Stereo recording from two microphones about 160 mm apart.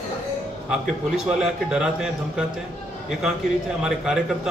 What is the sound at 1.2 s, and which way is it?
Speech, 5° right (ahead or behind).